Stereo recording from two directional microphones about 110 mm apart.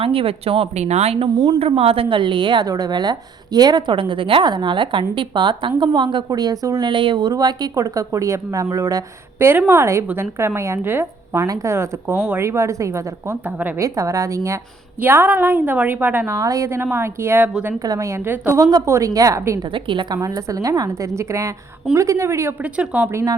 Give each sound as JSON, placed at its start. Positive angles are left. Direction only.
{"t": 0.0, "sound": "a woman's voice", "side_deg": -60}
{"t": 6.2, "sound": "speech", "side_deg": -35}
{"t": 9.4, "sound": "a woman's voice", "side_deg": -20}
{"t": 16.3, "sound": "speech", "side_deg": -30}
{"t": 17.8, "sound": "speech", "side_deg": -30}
{"t": 18.3, "sound": "speech", "side_deg": -20}
{"t": 19.7, "sound": "a woman's voice", "side_deg": -50}
{"t": 20.2, "sound": "speech", "side_deg": -30}
{"t": 22.6, "sound": "a woman's voice", "side_deg": -15}